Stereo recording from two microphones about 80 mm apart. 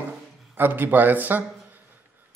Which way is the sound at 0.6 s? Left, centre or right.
Right.